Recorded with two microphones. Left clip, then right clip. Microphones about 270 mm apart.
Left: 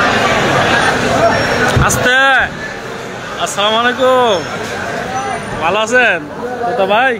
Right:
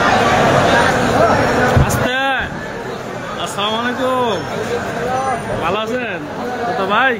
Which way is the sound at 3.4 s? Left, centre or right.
Centre.